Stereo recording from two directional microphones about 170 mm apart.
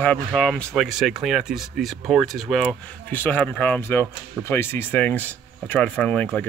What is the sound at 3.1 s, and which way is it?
Speech, 10° left (ahead or behind).